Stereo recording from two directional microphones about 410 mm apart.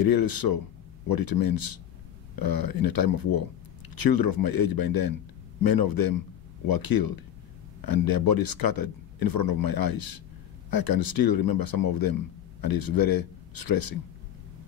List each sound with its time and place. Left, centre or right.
0.0 s speech: left